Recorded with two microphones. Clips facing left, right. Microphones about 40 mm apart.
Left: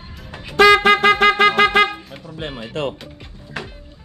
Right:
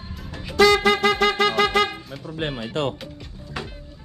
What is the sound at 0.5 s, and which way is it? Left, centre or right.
Wind instrument, left.